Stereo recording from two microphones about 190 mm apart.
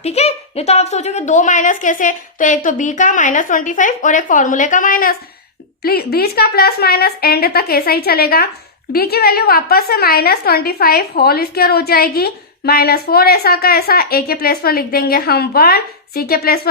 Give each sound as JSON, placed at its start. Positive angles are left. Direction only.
{"t": 0.0, "sound": "a woman's voice", "side_deg": 35}